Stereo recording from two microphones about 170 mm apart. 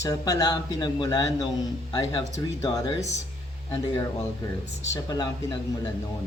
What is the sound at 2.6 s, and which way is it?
Speech, 20° left (ahead or behind).